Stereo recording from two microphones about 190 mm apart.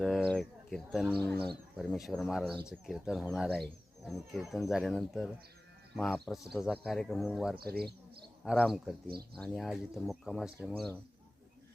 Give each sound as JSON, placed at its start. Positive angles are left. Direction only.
{"t": 0.0, "sound": "speech", "side_deg": 5}
{"t": 7.6, "sound": "speech", "side_deg": -55}
{"t": 8.4, "sound": "speech", "side_deg": 0}